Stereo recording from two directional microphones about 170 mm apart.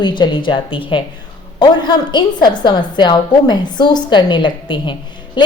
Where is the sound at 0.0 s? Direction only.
25° left (ahead or behind).